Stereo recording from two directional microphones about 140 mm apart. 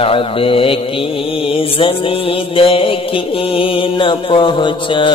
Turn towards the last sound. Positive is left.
turn(degrees=35)  # may be behind; listen again after turning